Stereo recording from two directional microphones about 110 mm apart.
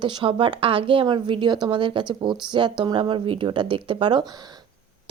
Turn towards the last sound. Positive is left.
turn(degrees=-45)  # may be behind; listen again after turning